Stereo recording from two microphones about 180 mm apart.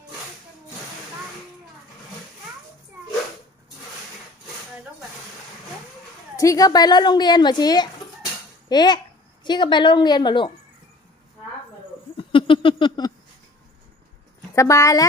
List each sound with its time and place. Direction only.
6.3 s a woman's voice: 20° left (ahead or behind)
12.1 s a sound: 30° left (ahead or behind)
14.5 s a woman's voice: 15° left (ahead or behind)